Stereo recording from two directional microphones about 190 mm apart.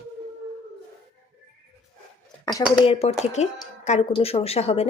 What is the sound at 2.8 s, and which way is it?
Speech, 35° left (ahead or behind).